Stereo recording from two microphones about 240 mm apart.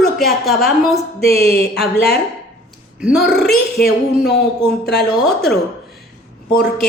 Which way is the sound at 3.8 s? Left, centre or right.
Left.